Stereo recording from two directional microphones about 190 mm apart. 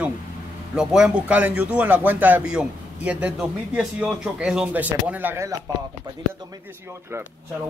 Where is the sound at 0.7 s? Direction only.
5° right (ahead or behind).